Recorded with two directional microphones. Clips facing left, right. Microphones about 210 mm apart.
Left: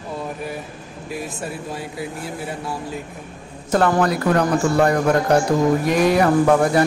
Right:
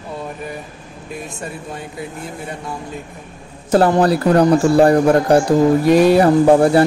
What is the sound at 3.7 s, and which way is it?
A man's voice, 35° right (ahead or behind).